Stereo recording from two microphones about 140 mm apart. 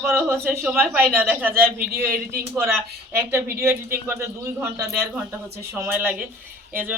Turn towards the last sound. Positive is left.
turn(degrees=-15)  # may be behind; listen again after turning